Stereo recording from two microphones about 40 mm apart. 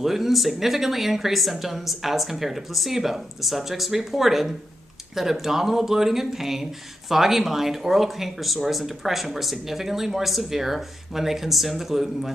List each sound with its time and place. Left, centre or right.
0.0 s speech: centre